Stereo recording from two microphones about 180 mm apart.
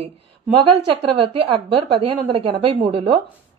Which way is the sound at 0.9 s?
30° right (ahead or behind).